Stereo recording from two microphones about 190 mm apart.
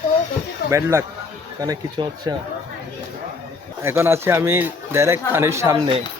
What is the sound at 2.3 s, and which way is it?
Speech, 20° right (ahead or behind).